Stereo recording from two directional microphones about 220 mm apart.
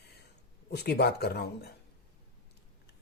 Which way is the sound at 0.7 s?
50° left (ahead or behind).